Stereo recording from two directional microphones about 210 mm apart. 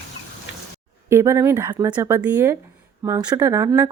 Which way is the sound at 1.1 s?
10° right (ahead or behind).